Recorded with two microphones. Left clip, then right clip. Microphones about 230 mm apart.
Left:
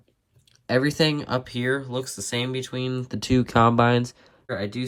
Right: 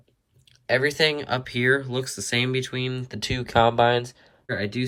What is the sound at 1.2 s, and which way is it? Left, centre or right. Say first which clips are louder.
Speech: right 1 dB; centre.